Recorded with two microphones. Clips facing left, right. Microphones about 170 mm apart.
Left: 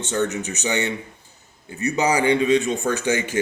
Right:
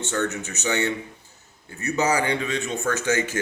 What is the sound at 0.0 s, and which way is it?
Speech, 15° left (ahead or behind).